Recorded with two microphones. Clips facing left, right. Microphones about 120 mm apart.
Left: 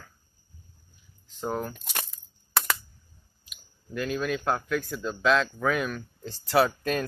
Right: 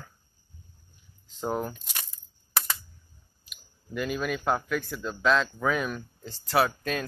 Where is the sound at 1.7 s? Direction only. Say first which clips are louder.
Left 6 dB; 60° left (ahead or behind).